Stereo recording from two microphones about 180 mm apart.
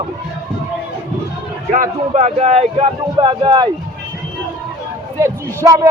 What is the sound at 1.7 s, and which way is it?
A man's voice, 45° right (ahead or behind).